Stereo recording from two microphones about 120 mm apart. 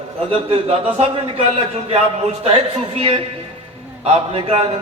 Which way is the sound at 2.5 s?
50° right (ahead or behind).